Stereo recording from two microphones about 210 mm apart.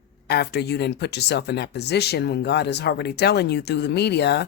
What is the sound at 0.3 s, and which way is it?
Speech, 50° left (ahead or behind).